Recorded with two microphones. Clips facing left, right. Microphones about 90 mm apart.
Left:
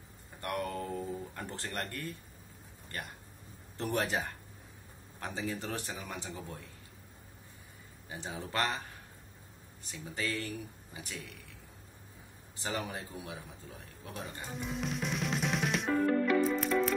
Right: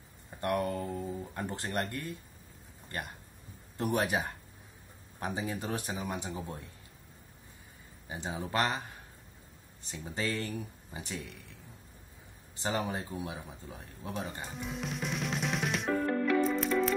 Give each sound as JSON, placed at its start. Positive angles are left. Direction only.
{"t": 0.4, "sound": "a man's voice", "side_deg": -20}
{"t": 3.7, "sound": "a man's voice", "side_deg": -15}
{"t": 8.1, "sound": "a man's voice", "side_deg": -20}
{"t": 9.8, "sound": "a man's voice", "side_deg": -25}
{"t": 12.6, "sound": "a man's voice", "side_deg": -25}
{"t": 14.2, "sound": "music", "side_deg": 0}